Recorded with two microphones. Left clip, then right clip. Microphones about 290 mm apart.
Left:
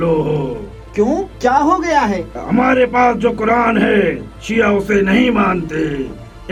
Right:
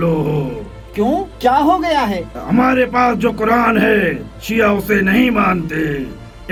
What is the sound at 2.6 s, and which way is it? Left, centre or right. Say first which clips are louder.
Speech: left 2 dB; right.